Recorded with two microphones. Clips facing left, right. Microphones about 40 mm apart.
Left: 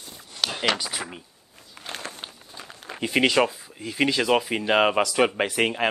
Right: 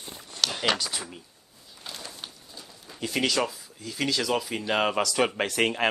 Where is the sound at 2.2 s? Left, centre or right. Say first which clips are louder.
Left 3 dB; left.